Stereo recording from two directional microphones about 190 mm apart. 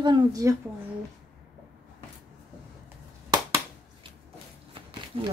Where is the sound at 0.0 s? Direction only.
20° right (ahead or behind).